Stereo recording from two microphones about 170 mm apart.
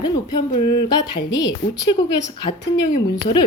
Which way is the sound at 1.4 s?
25° left (ahead or behind).